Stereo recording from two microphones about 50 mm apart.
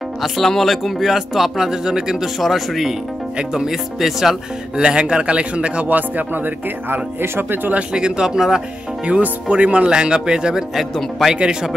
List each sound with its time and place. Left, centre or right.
0.2 s speech: centre
4.8 s speech: centre
5.9 s speech: right
7.9 s speech: centre
9.0 s speech: right